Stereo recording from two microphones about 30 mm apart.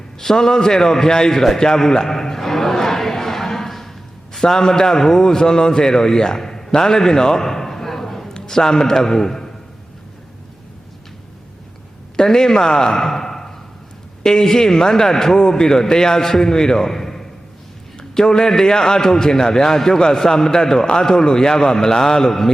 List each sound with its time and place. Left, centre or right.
0.3 s a man's voice: left
2.1 s a sound: centre
4.4 s a man's voice: centre
12.1 s a man's voice: left
13.0 s a sound: centre
14.3 s a man's voice: centre